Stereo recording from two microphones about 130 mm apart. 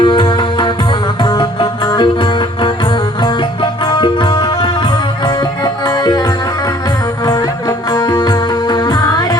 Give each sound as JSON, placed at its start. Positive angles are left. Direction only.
{"t": 0.0, "sound": "music", "side_deg": 40}